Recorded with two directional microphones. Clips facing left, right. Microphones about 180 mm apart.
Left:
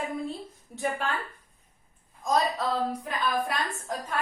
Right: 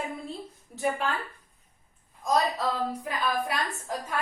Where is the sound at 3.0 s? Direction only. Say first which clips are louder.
Even; 5° right (ahead or behind).